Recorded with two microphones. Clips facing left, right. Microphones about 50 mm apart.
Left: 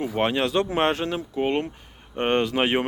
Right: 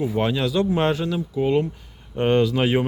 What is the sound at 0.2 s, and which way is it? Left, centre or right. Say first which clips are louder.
A man's voice: left 1 dB; left.